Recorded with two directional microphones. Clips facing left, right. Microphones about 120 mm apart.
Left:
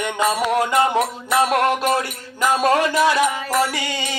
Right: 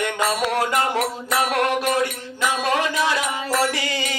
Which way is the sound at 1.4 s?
30° left (ahead or behind).